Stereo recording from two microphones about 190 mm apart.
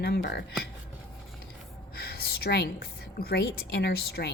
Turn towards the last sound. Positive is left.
turn(degrees=55)  # may be behind; listen again after turning